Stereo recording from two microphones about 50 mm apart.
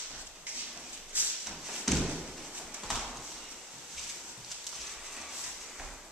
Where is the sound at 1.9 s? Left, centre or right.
Centre.